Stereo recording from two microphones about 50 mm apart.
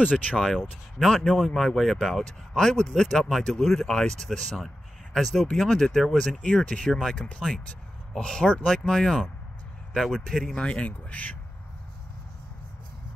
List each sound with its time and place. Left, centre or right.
0.0 s speech: left
0.9 s speech: centre
6.4 s speech: centre
9.9 s speech: centre
10.5 s speech: left